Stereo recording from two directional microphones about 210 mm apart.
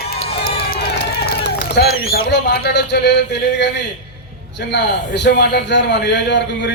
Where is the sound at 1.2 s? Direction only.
55° left (ahead or behind).